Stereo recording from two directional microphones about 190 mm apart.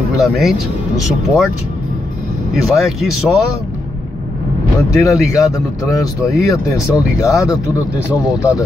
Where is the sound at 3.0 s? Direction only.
Centre (ahead or behind).